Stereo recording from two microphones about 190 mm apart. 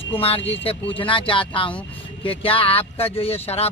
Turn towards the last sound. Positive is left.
turn(degrees=30)  # may be behind; listen again after turning